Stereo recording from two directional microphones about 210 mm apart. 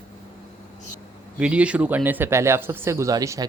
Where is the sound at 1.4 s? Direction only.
5° right (ahead or behind).